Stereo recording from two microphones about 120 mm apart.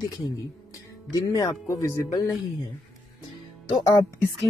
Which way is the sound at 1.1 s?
30° left (ahead or behind).